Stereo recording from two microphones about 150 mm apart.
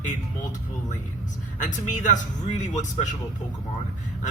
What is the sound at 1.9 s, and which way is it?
Speech, 55° left (ahead or behind).